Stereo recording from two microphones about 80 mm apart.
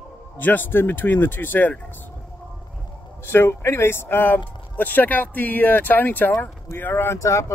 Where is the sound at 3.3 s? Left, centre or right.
Left.